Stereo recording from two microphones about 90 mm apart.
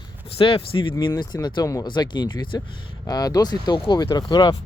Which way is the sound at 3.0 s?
45° left (ahead or behind).